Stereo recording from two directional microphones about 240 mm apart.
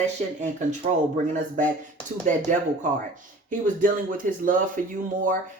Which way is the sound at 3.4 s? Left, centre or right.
Right.